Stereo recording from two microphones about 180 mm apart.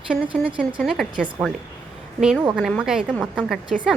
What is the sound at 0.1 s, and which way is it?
A woman's voice, centre (ahead or behind).